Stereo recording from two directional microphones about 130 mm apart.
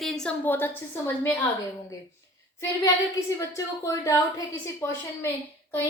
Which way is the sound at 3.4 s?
25° left (ahead or behind).